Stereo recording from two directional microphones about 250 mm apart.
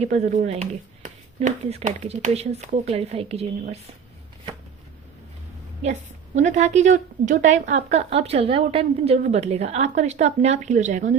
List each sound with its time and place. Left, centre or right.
0.0 s a woman's voice: right
5.8 s a woman's voice: right